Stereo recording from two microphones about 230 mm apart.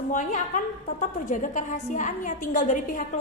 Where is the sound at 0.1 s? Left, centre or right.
Left.